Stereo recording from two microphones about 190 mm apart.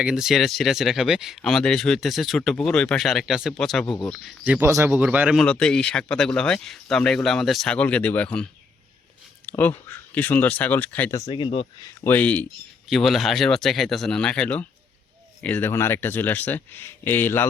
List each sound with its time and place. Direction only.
0.0 s speech: 5° right (ahead or behind)
4.6 s a man's voice: 15° right (ahead or behind)
5.4 s speech: 5° left (ahead or behind)
9.5 s speech: 10° left (ahead or behind)
11.3 s speech: 25° left (ahead or behind)
11.8 s speech: 10° left (ahead or behind)